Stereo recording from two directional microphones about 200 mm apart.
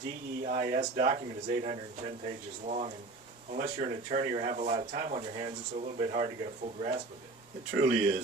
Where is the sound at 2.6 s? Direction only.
35° right (ahead or behind).